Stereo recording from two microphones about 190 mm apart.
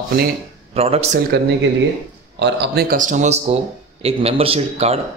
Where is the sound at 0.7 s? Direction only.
30° right (ahead or behind).